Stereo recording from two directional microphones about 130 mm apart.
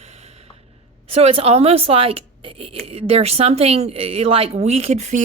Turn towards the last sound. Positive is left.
turn(degrees=-60)  # may be behind; listen again after turning